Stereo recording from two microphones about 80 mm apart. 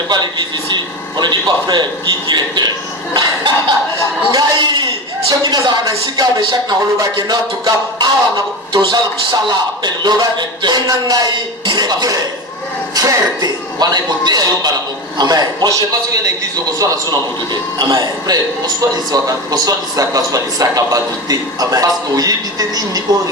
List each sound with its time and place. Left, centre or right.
1.2 s a man's voice: right
17.5 s speech: right